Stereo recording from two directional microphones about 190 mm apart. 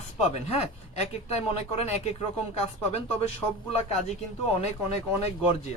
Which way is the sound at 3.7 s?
35° left (ahead or behind).